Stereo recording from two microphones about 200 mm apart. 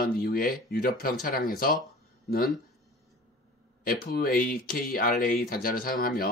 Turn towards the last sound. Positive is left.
turn(degrees=45)  # may be behind; listen again after turning